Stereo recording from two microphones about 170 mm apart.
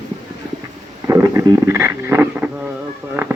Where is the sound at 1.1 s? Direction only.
15° right (ahead or behind).